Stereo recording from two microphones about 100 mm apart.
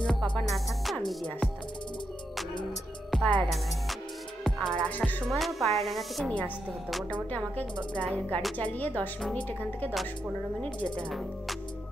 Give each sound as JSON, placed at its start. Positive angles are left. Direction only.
{"t": 0.2, "sound": "music", "side_deg": 0}
{"t": 3.1, "sound": "music", "side_deg": 5}
{"t": 4.6, "sound": "music", "side_deg": 5}
{"t": 4.8, "sound": "speech", "side_deg": 15}
{"t": 5.2, "sound": "a woman's voice", "side_deg": 0}
{"t": 7.2, "sound": "speech", "side_deg": 15}